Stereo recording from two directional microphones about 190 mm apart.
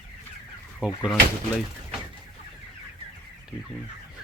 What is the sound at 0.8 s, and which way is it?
Speech, 5° right (ahead or behind).